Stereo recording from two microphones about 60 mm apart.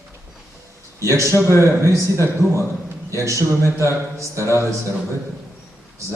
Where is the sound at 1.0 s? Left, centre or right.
Right.